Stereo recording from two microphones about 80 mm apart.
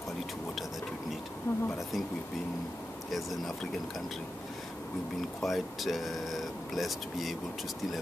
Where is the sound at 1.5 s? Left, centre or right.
Left.